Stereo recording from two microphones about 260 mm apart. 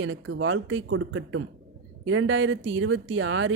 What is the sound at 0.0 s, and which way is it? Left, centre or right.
Speech, right.